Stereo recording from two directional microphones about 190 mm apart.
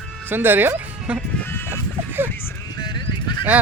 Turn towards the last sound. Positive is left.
turn(degrees=25)  # may be behind; listen again after turning